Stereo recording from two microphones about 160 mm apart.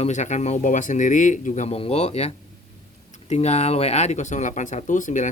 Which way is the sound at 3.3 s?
45° left (ahead or behind).